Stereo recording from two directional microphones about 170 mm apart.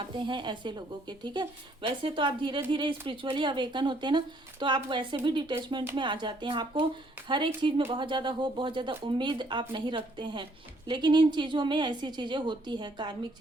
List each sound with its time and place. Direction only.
0.2 s speech: 30° right (ahead or behind)